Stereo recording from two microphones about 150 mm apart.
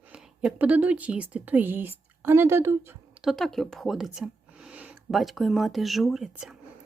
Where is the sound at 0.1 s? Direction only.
5° right (ahead or behind).